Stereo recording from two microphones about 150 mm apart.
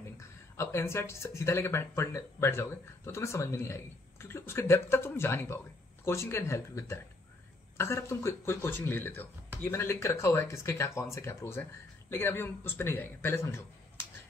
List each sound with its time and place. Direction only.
0.6 s speech: 20° left (ahead or behind)